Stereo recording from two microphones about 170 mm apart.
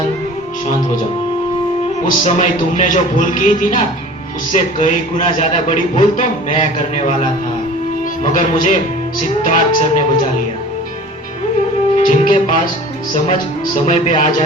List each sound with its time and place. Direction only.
2.0 s a man's voice: 45° left (ahead or behind)
11.9 s music: 45° left (ahead or behind)
13.8 s a man's voice: 45° left (ahead or behind)